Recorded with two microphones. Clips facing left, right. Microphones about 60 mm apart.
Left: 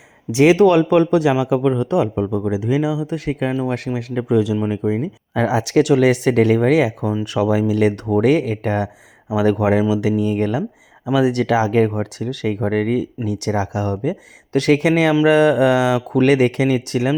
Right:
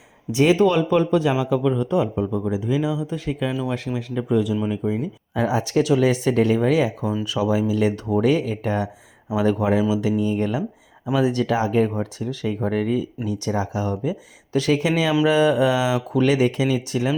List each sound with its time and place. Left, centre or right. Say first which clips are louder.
0.3 s speech: left 5 dB; left
3.5 s speech: left 4 dB; left
3.8 s speech: left 3 dB; left
4.3 s speech: left 4 dB; left
4.7 s speech: left 4 dB; left
16.0 s speech: left 4 dB; left